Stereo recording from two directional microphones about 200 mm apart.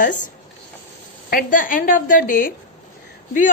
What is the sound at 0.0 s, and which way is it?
Speech, 40° left (ahead or behind).